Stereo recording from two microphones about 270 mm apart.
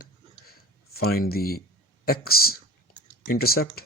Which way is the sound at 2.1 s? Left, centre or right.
Left.